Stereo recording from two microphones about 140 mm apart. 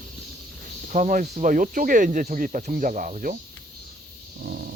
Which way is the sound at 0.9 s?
70° right (ahead or behind).